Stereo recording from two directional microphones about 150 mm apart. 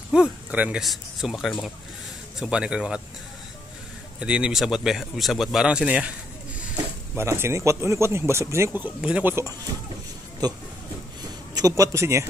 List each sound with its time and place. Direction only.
0.1 s speech: 5° right (ahead or behind)
4.2 s speech: 5° right (ahead or behind)
7.2 s speech: 15° right (ahead or behind)
10.4 s a man's voice: 25° right (ahead or behind)